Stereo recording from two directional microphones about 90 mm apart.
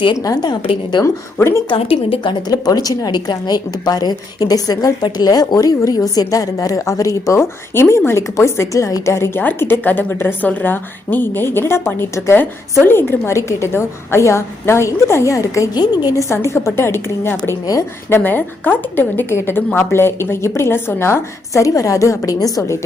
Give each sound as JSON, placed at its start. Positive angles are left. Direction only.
{"t": 0.6, "sound": "a woman's voice", "side_deg": 65}
{"t": 1.4, "sound": "a woman's voice", "side_deg": 30}
{"t": 2.0, "sound": "a woman's voice", "side_deg": 85}
{"t": 2.5, "sound": "a woman's voice", "side_deg": 45}
{"t": 15.7, "sound": "a woman's voice", "side_deg": 50}
{"t": 16.1, "sound": "a woman's voice", "side_deg": 30}